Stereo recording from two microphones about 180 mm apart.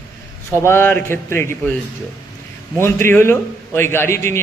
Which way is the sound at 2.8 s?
15° left (ahead or behind).